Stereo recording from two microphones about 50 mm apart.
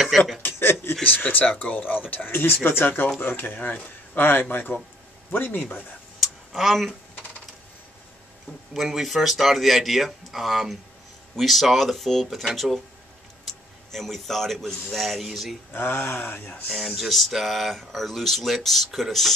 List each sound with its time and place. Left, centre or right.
0.4 s a sound: left
1.0 s speech: left
5.8 s a sound: centre
8.7 s a man's voice: centre
15.7 s speech: left
16.7 s speech: centre